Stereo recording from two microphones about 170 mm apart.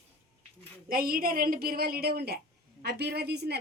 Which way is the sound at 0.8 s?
60° right (ahead or behind).